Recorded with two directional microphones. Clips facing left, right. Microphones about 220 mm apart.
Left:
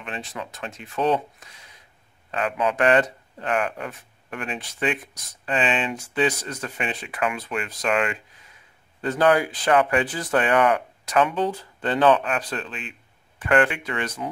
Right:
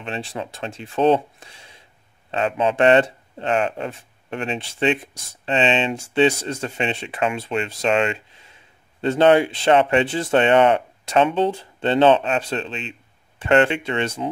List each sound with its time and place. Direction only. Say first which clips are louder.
0.0 s speech: right 5 dB; 30° right (ahead or behind)